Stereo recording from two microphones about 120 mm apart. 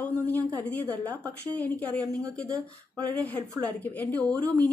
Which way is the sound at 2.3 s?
5° left (ahead or behind).